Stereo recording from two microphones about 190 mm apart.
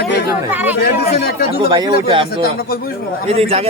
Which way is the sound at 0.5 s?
10° right (ahead or behind).